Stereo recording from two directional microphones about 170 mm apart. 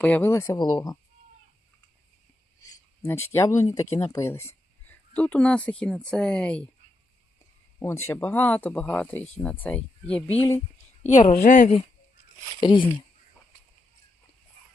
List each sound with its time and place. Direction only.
0.0 s speech: 10° left (ahead or behind)
2.6 s a sound: 15° left (ahead or behind)
3.3 s speech: 15° left (ahead or behind)
7.8 s speech: 15° left (ahead or behind)
11.1 s speech: 45° left (ahead or behind)
12.5 s speech: 30° left (ahead or behind)